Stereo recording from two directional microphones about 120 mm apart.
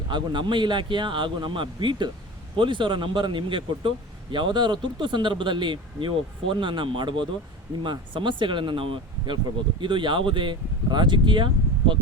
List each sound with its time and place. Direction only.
0.1 s a man's voice: 40° right (ahead or behind)